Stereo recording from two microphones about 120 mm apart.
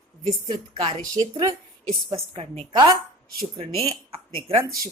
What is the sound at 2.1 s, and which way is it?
Speech, 55° right (ahead or behind).